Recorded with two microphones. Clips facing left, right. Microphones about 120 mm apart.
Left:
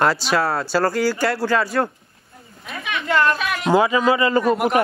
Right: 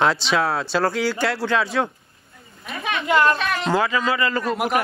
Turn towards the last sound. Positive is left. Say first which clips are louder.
# left 4 dB
turn(degrees=0)  # may be behind; listen again after turning